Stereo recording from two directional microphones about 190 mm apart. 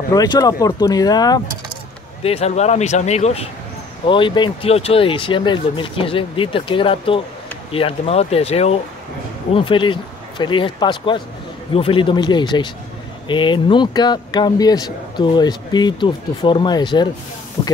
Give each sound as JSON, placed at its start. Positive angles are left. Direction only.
{"t": 0.1, "sound": "speech", "side_deg": 20}
{"t": 2.2, "sound": "speech", "side_deg": 35}